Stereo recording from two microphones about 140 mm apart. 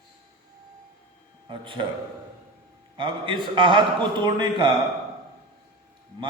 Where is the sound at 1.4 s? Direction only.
35° right (ahead or behind).